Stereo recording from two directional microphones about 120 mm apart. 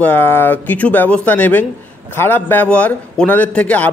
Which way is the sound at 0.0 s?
15° left (ahead or behind).